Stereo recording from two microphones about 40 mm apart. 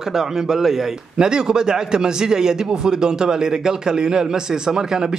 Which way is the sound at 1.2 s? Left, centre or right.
Centre.